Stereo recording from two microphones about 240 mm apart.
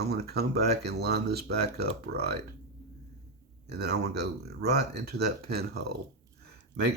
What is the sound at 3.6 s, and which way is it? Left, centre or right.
Speech, right.